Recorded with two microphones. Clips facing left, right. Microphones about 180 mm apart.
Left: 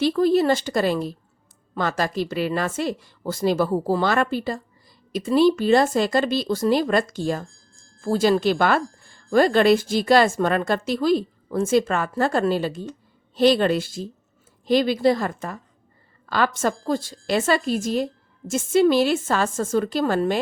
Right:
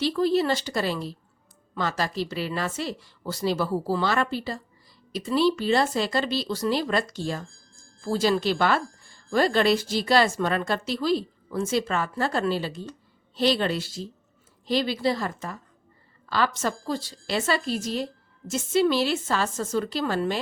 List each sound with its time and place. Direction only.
0.0 s a woman's voice: 50° left (ahead or behind)